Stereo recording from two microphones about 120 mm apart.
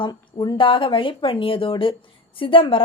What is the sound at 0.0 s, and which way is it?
Speech, 35° left (ahead or behind).